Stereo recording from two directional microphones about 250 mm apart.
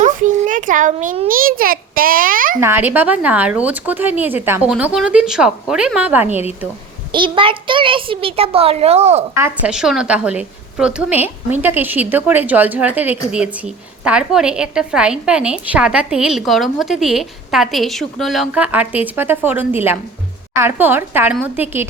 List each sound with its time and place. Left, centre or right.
0.0 s a sound: right
1.3 s a child's voice: right
2.6 s a woman's voice: centre
7.1 s a child's voice: centre
9.3 s a woman's voice: centre